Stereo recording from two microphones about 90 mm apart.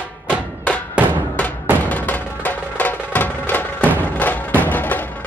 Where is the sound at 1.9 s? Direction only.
20° left (ahead or behind).